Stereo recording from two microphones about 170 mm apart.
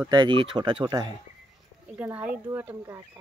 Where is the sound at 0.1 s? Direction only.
25° right (ahead or behind).